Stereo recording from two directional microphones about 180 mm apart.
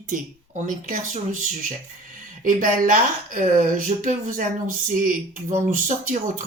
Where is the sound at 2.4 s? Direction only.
50° right (ahead or behind).